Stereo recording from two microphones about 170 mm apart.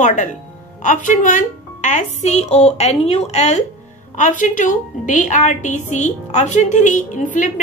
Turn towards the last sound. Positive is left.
turn(degrees=50)  # may be behind; listen again after turning